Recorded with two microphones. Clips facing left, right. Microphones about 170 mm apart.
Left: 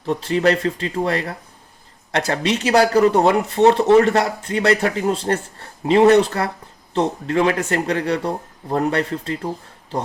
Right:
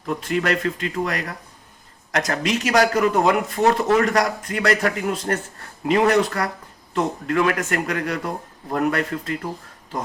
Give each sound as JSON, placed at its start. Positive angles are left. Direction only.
{"t": 0.0, "sound": "speech", "side_deg": 30}